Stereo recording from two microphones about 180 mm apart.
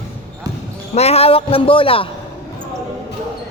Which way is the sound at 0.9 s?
35° left (ahead or behind).